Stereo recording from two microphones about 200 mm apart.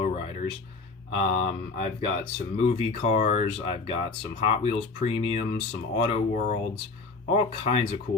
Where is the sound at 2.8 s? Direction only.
30° left (ahead or behind).